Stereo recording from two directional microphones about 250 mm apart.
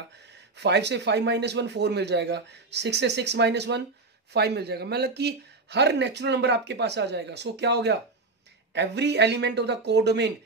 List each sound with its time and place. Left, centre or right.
0.6 s a man's voice: right